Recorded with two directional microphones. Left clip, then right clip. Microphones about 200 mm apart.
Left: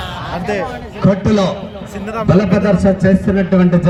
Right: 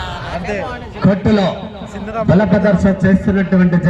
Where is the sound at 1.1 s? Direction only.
55° left (ahead or behind).